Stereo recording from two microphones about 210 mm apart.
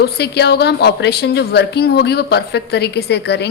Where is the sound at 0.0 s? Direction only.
50° left (ahead or behind).